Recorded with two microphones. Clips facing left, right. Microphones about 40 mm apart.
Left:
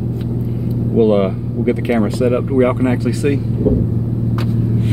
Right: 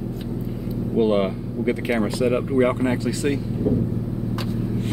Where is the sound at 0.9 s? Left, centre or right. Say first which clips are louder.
Left 6 dB; centre.